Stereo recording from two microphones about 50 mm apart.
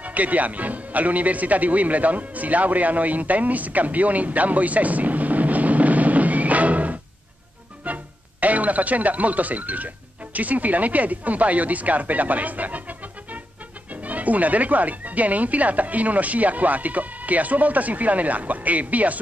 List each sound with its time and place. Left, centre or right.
0.0 s speech: right